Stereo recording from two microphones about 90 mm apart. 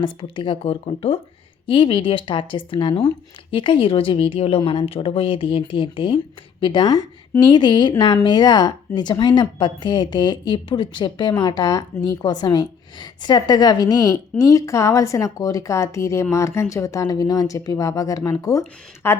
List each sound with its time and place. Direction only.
0.0 s speech: 70° left (ahead or behind); by 1.2 s 90° left
1.6 s speech: 75° left (ahead or behind)
6.6 s speech: 65° left (ahead or behind)
6.8 s a woman's voice: 55° left (ahead or behind); by 18.6 s 40° left (ahead or behind)
19.0 s a woman's voice: 25° left (ahead or behind)